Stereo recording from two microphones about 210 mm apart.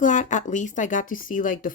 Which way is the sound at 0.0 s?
35° left (ahead or behind).